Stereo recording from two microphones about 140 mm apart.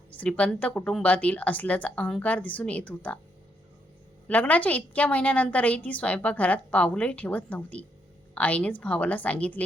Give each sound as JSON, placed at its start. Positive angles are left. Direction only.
{"t": 0.2, "sound": "a woman's voice", "side_deg": 10}
{"t": 4.3, "sound": "a woman's voice", "side_deg": 10}